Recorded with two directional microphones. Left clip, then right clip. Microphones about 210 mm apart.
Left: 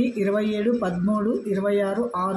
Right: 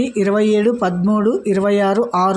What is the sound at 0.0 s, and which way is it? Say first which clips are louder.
Speech: right 7 dB; 35° right (ahead or behind).